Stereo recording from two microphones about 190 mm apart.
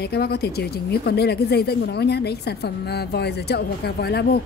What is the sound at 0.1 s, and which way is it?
A woman's voice, 55° left (ahead or behind).